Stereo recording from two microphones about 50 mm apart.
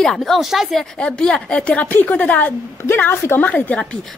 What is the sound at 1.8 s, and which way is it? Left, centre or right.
Speech, left.